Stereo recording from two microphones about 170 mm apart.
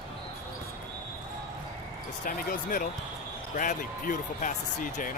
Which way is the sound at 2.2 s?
55° left (ahead or behind).